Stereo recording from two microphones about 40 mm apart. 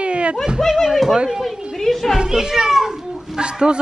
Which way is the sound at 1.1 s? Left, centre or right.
Centre.